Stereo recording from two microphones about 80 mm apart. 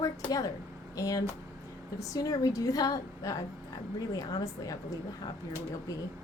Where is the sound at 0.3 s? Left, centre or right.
Left.